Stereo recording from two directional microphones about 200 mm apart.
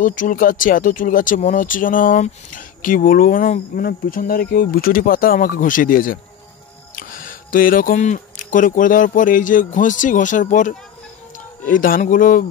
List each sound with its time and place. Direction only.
0.0 s speech: 40° left (ahead or behind)